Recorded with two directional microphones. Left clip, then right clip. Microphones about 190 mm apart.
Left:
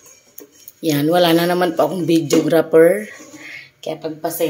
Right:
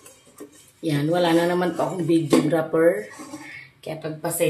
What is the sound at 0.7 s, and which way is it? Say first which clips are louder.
Speech: left 7 dB; 55° left (ahead or behind).